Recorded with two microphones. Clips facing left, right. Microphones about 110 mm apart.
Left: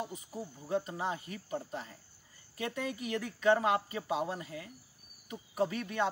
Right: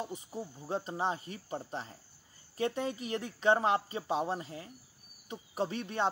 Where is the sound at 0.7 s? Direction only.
30° right (ahead or behind).